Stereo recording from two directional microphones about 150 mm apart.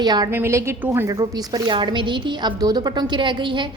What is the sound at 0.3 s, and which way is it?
A woman's voice, 15° right (ahead or behind).